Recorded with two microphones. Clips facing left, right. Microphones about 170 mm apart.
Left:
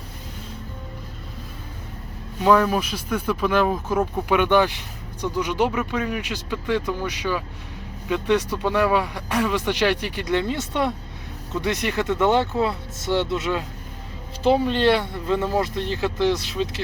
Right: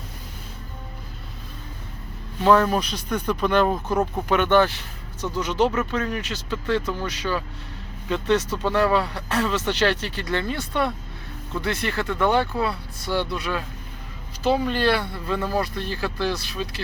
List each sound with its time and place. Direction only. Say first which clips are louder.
2.4 s speech: even; 10° left (ahead or behind)